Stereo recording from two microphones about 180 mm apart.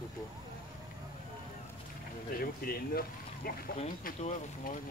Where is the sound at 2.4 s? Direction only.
55° left (ahead or behind).